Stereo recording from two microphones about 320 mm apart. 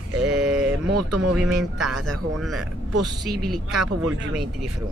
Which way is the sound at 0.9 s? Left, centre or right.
Right.